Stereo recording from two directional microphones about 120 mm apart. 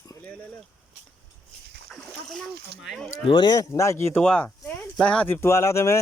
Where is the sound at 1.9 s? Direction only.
Centre (ahead or behind).